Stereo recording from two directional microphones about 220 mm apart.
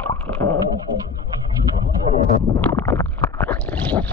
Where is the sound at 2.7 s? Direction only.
10° left (ahead or behind).